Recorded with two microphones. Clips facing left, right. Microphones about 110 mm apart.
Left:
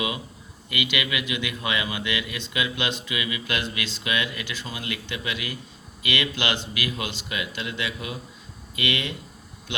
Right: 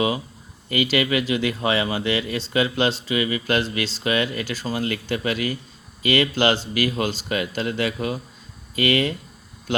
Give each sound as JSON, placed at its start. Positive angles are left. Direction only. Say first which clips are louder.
{"t": 0.7, "sound": "speech", "louder": "right 7 dB", "side_deg": -40}